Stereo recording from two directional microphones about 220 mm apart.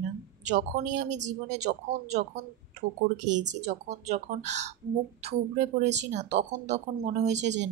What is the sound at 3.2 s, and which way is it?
Speech, 35° right (ahead or behind).